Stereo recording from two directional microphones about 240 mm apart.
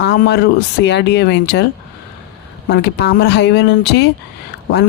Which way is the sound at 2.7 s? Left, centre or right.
Left.